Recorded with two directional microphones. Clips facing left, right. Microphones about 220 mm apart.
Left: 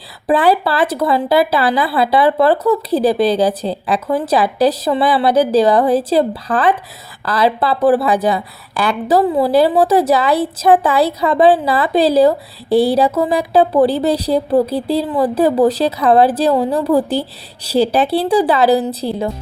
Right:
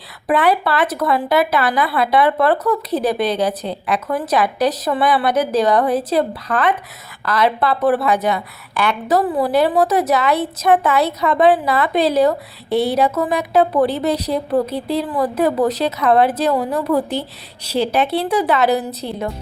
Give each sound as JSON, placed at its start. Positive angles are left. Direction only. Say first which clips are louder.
{"t": 0.3, "sound": "speech", "louder": "left 3 dB", "side_deg": 30}